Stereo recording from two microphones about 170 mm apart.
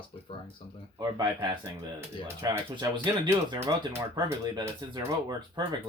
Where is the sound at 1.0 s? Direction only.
25° right (ahead or behind).